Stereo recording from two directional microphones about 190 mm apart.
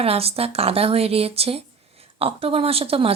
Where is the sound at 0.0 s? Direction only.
30° right (ahead or behind).